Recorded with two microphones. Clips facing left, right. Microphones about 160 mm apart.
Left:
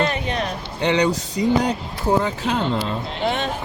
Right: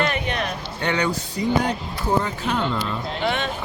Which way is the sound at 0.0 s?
30° left (ahead or behind).